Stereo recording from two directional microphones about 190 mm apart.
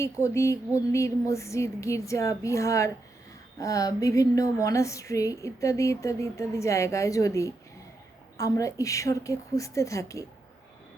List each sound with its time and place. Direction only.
0.0 s a woman's voice: 15° left (ahead or behind)